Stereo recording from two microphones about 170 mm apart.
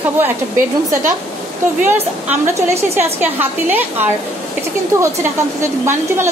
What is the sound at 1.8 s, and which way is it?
A woman's voice, 15° right (ahead or behind).